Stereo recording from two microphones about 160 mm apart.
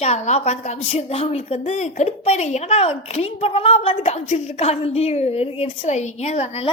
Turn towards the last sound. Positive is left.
turn(degrees=40)  # may be behind; listen again after turning